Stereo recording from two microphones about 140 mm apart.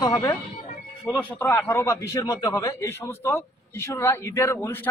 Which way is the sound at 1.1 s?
20° left (ahead or behind).